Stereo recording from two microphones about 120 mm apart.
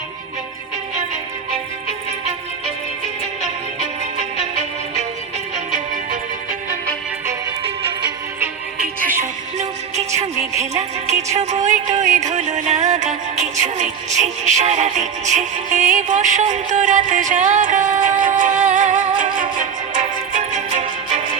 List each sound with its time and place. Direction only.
9.1 s music: 70° right (ahead or behind)